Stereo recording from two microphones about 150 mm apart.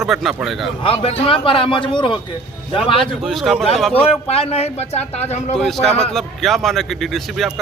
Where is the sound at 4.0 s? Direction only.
40° left (ahead or behind).